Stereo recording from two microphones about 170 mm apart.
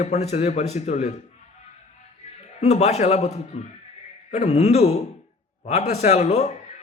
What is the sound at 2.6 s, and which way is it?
A man's voice, 40° left (ahead or behind).